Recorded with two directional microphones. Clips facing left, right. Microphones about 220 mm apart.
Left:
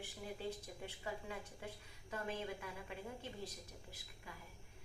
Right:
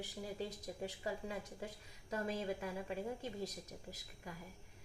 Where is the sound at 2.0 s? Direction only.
40° right (ahead or behind).